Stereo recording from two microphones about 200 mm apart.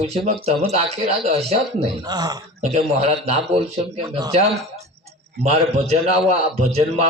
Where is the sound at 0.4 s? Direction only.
30° right (ahead or behind).